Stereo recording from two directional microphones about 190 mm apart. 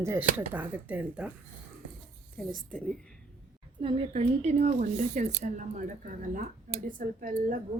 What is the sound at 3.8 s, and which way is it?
A woman's voice, 30° right (ahead or behind).